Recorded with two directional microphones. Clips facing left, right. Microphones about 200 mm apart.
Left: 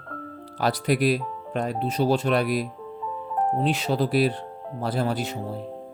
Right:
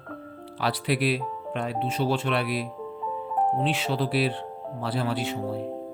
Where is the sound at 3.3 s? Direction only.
5° right (ahead or behind).